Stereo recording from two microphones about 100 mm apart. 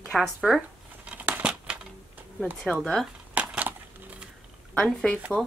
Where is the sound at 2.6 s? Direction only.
5° left (ahead or behind).